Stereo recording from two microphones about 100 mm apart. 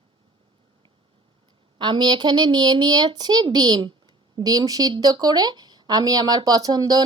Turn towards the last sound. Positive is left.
turn(degrees=-40)  # may be behind; listen again after turning